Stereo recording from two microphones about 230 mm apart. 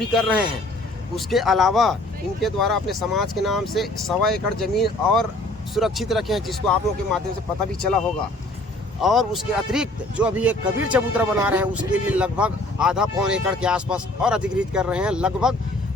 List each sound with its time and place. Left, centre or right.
0.0 s speech: centre
9.0 s speech: centre